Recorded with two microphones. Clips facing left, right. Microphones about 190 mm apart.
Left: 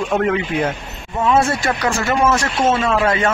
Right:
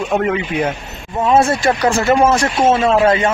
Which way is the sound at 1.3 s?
35° right (ahead or behind).